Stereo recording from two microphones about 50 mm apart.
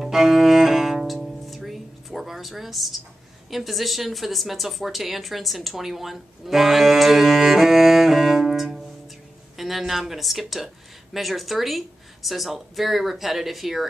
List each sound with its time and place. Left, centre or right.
0.0 s cello: centre
3.4 s a woman's voice: centre